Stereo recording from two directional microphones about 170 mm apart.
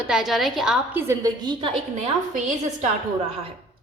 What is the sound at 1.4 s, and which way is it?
Speech, 30° right (ahead or behind).